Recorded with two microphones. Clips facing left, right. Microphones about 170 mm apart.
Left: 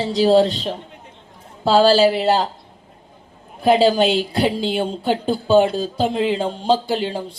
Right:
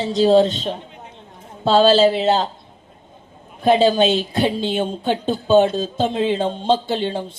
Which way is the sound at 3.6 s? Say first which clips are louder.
Even; 20° right (ahead or behind).